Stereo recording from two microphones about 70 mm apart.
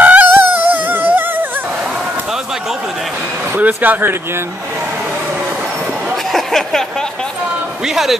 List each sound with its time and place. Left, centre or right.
0.0 s music: right
3.5 s speech: right
6.3 s a sound: centre
7.8 s a man's voice: centre